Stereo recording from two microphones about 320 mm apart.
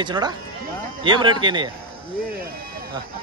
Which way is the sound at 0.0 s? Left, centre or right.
Centre.